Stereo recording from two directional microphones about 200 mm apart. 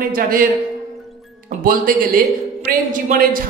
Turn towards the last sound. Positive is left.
turn(degrees=-45)  # may be behind; listen again after turning